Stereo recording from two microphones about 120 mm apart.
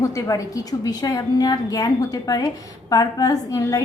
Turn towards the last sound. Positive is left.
turn(degrees=30)  # may be behind; listen again after turning